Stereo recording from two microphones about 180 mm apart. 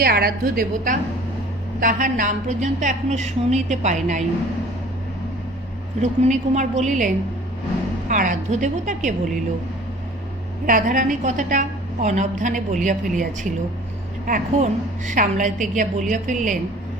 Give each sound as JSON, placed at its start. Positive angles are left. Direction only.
{"t": 0.0, "sound": "a woman's voice", "side_deg": -55}
{"t": 6.0, "sound": "a woman's voice", "side_deg": -40}
{"t": 10.7, "sound": "a woman's voice", "side_deg": -45}